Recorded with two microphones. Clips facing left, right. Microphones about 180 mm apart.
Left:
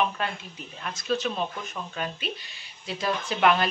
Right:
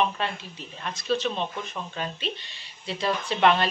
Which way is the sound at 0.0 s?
Centre (ahead or behind).